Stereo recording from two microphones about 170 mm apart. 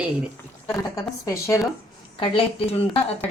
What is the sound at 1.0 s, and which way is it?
Speech, 20° left (ahead or behind).